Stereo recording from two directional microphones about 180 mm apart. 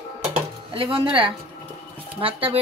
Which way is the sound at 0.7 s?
30° right (ahead or behind).